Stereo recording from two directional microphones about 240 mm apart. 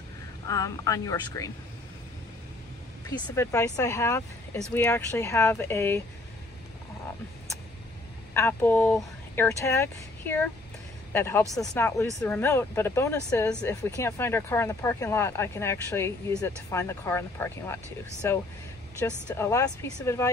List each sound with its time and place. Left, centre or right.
0.5 s speech: centre
3.3 s speech: centre
8.4 s speech: centre